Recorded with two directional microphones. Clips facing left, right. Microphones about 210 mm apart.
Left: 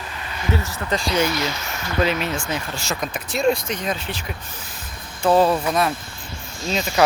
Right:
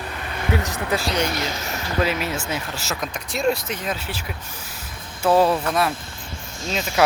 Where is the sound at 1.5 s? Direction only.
40° right (ahead or behind).